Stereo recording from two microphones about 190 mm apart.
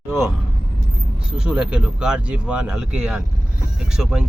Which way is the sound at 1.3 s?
5° right (ahead or behind).